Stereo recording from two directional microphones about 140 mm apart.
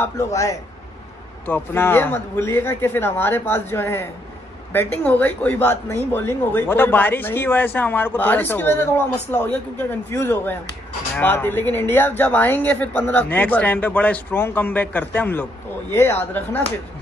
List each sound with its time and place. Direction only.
0.0 s a man's voice: 20° left (ahead or behind)